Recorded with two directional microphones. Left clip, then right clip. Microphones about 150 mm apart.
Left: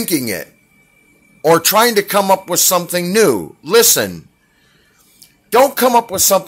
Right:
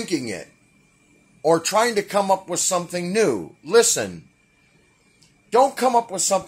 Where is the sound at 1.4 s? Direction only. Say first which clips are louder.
Left 7 dB; 30° left (ahead or behind).